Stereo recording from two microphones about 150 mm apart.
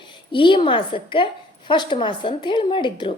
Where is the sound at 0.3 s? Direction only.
35° left (ahead or behind).